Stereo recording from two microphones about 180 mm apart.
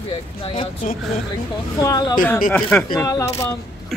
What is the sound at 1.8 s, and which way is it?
Speech, 20° left (ahead or behind).